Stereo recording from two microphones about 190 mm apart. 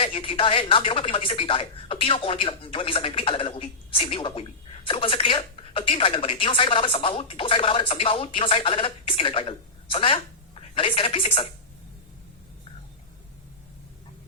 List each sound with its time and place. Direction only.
0.0 s speech: 30° left (ahead or behind)